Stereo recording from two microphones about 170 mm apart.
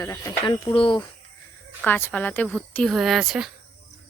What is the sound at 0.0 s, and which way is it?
Speech, 20° left (ahead or behind).